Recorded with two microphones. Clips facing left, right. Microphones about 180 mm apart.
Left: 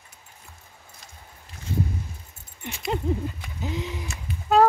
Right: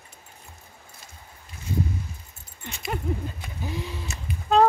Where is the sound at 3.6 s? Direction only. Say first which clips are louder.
Left 2 dB; 20° left (ahead or behind).